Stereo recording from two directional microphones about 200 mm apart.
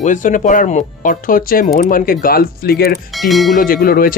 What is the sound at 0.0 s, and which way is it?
Speech, 40° left (ahead or behind).